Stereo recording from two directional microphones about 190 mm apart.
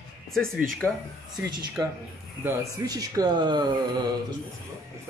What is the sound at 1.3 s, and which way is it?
Speech, 20° right (ahead or behind).